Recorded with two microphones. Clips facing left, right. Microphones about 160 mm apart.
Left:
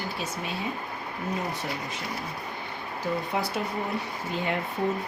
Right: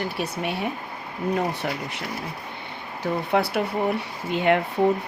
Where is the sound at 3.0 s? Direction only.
65° right (ahead or behind).